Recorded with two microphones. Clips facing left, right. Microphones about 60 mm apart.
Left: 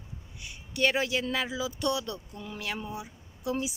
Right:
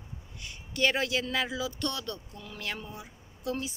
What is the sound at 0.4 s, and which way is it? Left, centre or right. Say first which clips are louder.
A woman's voice: left 1 dB; centre.